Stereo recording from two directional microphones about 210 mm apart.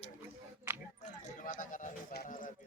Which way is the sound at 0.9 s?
35° left (ahead or behind).